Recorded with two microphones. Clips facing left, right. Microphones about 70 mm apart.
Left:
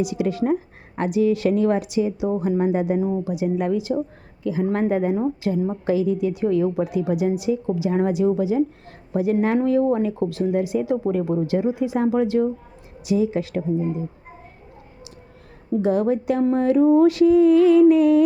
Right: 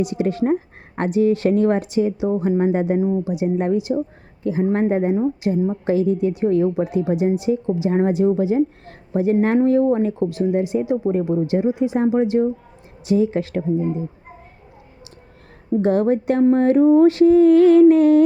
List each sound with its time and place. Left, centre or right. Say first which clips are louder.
0.0 s a woman's voice: right 2 dB; right
5.8 s a woman's voice: right 2 dB; right
10.2 s speech: right 2 dB; right
13.1 s a woman's voice: right 3 dB; right
15.7 s a woman's voice: right 3 dB; right